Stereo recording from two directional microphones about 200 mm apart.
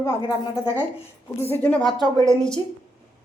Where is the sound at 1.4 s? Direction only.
10° left (ahead or behind).